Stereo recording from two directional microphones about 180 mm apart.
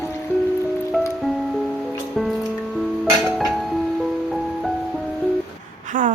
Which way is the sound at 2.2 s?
5° left (ahead or behind).